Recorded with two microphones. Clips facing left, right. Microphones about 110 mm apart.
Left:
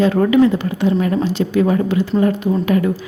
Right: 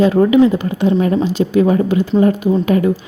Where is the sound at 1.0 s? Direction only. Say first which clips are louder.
Right 3 dB; 30° right (ahead or behind).